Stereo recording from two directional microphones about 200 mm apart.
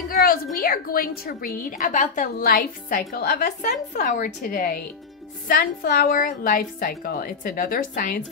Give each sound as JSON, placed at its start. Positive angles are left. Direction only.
{"t": 0.2, "sound": "a woman's voice", "side_deg": 45}
{"t": 3.9, "sound": "a woman's voice", "side_deg": 35}